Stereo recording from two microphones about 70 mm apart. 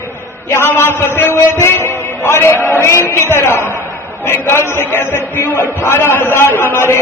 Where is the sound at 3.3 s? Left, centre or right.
Left.